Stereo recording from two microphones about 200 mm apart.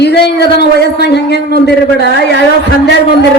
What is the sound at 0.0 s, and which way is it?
Speech, 55° left (ahead or behind).